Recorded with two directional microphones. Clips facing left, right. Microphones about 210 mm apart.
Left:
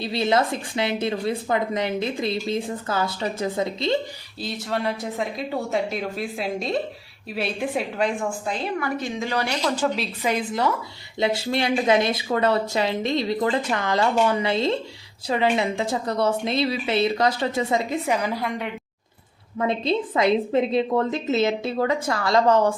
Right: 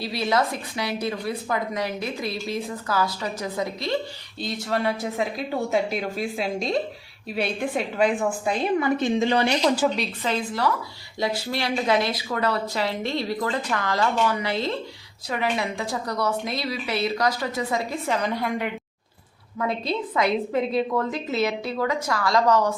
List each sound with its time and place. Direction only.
0.0 s a woman's voice: 25° left (ahead or behind)
4.4 s speech: centre (ahead or behind)
8.4 s a woman's voice: 20° right (ahead or behind)
9.7 s speech: centre (ahead or behind)
10.2 s a woman's voice: 15° left (ahead or behind); by 18.7 s centre (ahead or behind)
19.5 s a woman's voice: 25° left (ahead or behind)